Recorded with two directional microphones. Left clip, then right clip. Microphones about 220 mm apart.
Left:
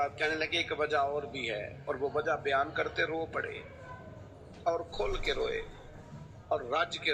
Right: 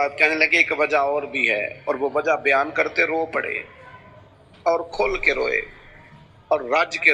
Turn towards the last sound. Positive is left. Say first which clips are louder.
# right 12 dB
turn(degrees=-35)  # may be behind; listen again after turning